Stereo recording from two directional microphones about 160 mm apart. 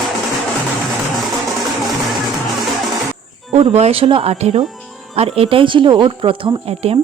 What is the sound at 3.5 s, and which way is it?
Speech, 40° right (ahead or behind).